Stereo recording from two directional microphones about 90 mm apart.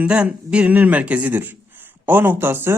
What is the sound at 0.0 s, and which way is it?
A man's voice, 15° right (ahead or behind).